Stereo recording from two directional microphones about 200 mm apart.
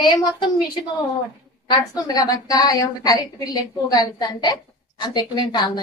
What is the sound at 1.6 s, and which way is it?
A woman's voice, 20° left (ahead or behind).